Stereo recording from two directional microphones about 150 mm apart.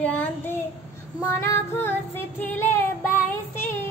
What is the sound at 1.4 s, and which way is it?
Child singing, 15° left (ahead or behind).